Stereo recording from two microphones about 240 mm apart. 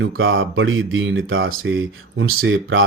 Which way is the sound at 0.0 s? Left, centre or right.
Right.